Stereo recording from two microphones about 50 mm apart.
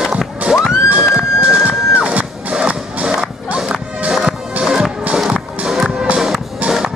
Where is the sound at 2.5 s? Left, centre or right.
Right.